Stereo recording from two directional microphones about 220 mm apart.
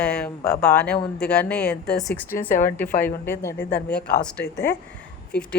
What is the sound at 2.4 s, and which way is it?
Speech, 40° left (ahead or behind).